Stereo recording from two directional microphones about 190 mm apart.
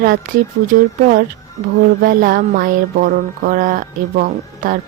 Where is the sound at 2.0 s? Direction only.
45° right (ahead or behind).